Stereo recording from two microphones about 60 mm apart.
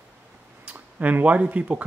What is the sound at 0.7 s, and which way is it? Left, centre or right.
Speech, right.